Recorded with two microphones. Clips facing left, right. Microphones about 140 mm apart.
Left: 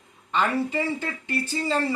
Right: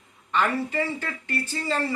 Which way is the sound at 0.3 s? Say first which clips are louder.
Left 1 dB; 20° left (ahead or behind).